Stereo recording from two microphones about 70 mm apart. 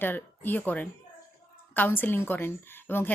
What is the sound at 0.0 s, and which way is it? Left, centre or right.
A woman's voice, left.